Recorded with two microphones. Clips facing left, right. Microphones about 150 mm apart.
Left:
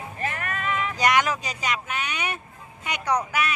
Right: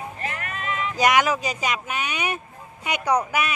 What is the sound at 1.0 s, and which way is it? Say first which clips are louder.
Speech: right 3 dB; 10° right (ahead or behind).